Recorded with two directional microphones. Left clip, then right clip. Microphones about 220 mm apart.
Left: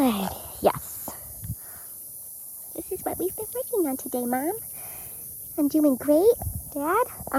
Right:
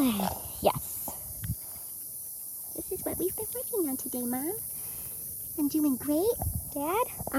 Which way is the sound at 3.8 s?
5° right (ahead or behind).